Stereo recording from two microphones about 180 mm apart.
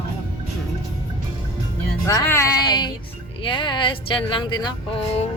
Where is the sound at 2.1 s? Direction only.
15° left (ahead or behind); by 5.2 s 30° left (ahead or behind).